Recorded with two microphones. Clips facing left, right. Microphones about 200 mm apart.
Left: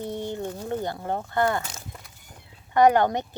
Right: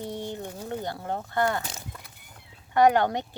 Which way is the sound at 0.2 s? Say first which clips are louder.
Left 4 dB; 15° left (ahead or behind).